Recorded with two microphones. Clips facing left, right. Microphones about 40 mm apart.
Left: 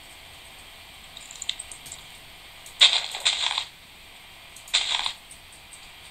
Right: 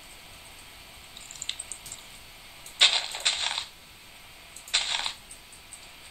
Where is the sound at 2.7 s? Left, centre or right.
Left.